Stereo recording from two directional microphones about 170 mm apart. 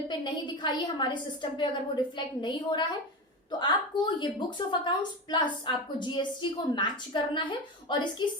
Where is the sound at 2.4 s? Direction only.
25° left (ahead or behind).